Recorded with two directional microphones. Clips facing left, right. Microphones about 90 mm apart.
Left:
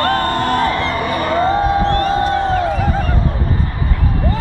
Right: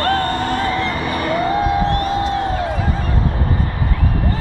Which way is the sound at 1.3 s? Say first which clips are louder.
Left 3 dB; 30° left (ahead or behind).